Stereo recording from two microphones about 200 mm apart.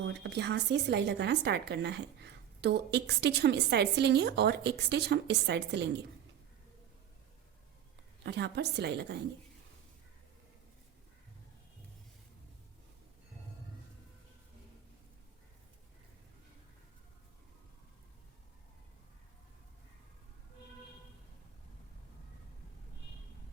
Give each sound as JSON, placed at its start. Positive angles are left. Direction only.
{"t": 0.1, "sound": "a woman's voice", "side_deg": -60}
{"t": 8.2, "sound": "a woman's voice", "side_deg": -55}